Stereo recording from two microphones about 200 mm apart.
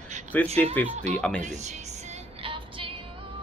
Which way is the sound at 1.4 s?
35° right (ahead or behind).